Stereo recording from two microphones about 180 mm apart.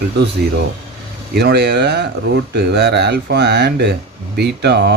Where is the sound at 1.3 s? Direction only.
65° right (ahead or behind).